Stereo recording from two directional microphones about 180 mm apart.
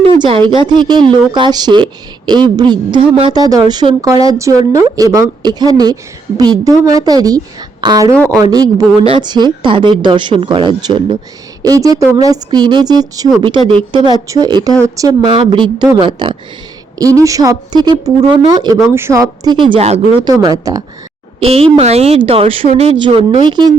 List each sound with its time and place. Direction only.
0.2 s speech: 25° right (ahead or behind)
8.1 s speech: 5° left (ahead or behind)
8.4 s speech: 20° right (ahead or behind)
20.2 s speech: 20° right (ahead or behind)
21.4 s a woman's voice: 35° right (ahead or behind)